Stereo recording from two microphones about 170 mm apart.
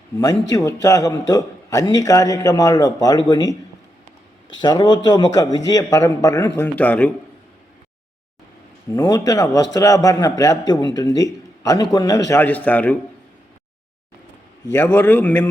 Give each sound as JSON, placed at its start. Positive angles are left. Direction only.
{"t": 0.5, "sound": "a man's voice", "side_deg": 20}
{"t": 4.6, "sound": "a man's voice", "side_deg": 25}
{"t": 8.9, "sound": "a man's voice", "side_deg": 20}
{"t": 14.7, "sound": "a man's voice", "side_deg": 15}